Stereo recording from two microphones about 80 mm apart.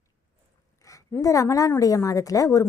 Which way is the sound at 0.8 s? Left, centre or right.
Left.